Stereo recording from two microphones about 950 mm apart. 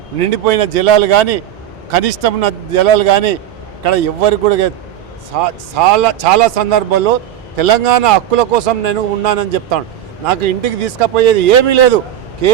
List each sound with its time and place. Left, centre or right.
0.2 s speech: right
5.3 s a man's voice: right